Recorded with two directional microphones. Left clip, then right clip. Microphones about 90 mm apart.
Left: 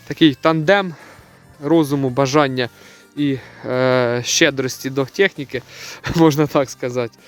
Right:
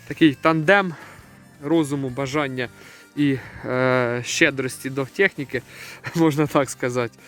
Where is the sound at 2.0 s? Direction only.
90° left.